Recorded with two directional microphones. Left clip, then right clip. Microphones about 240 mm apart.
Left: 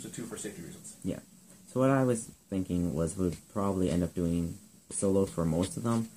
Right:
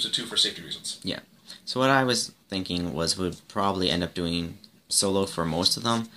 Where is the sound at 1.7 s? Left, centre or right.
Centre.